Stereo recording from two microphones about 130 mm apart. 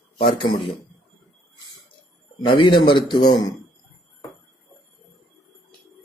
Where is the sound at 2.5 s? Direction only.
40° left (ahead or behind).